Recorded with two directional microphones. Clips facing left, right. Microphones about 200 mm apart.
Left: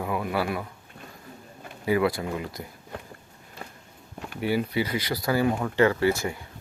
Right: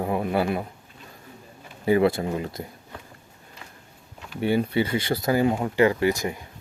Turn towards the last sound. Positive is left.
turn(degrees=-15)  # may be behind; listen again after turning